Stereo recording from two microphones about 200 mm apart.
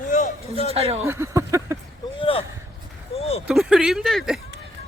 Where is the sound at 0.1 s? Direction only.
35° left (ahead or behind).